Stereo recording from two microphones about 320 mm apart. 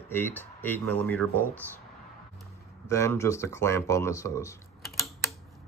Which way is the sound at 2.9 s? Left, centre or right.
Centre.